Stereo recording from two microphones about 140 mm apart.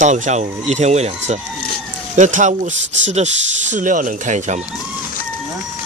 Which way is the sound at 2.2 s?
60° right (ahead or behind).